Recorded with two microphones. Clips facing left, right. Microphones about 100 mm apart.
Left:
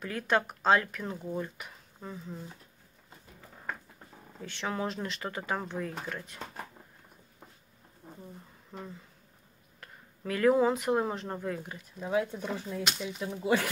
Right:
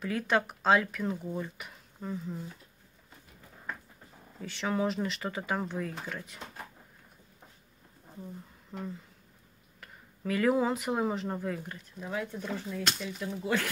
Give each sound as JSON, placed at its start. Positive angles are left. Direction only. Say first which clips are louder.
{"t": 0.0, "sound": "speech", "louder": "even", "side_deg": 0}
{"t": 4.4, "sound": "speech", "louder": "right 3 dB", "side_deg": 0}
{"t": 8.7, "sound": "speech", "louder": "right 4 dB", "side_deg": -5}
{"t": 12.0, "sound": "speech", "louder": "left 5 dB", "side_deg": 15}